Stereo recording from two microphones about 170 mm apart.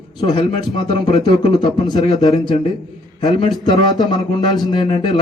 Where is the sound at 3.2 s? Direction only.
25° left (ahead or behind).